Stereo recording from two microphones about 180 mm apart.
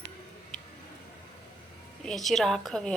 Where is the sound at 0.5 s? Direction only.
40° left (ahead or behind).